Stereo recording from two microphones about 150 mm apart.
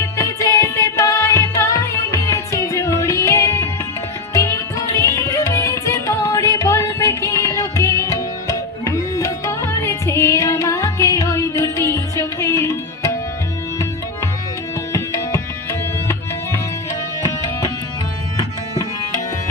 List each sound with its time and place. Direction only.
0.2 s music: 20° left (ahead or behind)
4.9 s music: 20° left (ahead or behind)
14.9 s tabla: 20° left (ahead or behind)